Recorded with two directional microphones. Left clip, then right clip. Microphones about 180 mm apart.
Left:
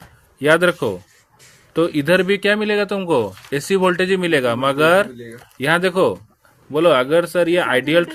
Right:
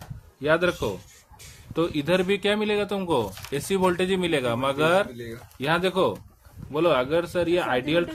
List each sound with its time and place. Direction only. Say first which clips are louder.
0.4 s speech: left 8 dB; 40° left (ahead or behind)